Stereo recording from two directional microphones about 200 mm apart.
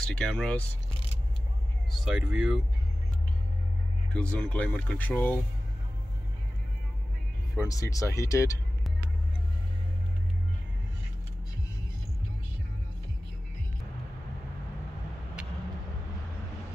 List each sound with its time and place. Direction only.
0.0 s speech: 5° left (ahead or behind)
2.0 s speech: 5° right (ahead or behind)
4.1 s speech: 5° left (ahead or behind)
7.6 s speech: 15° left (ahead or behind)